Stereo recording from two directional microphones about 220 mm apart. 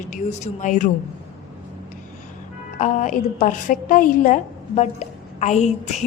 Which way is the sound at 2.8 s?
35° left (ahead or behind).